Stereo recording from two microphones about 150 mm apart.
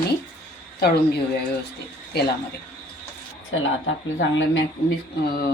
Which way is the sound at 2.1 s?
90° left.